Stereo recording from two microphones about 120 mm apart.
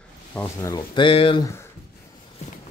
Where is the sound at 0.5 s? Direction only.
25° left (ahead or behind).